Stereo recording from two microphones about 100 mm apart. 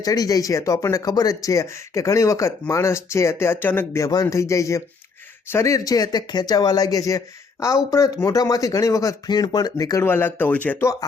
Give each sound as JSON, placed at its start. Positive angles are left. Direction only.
{"t": 0.0, "sound": "speech", "side_deg": 40}
{"t": 4.0, "sound": "speech", "side_deg": 35}
{"t": 10.1, "sound": "speech", "side_deg": 20}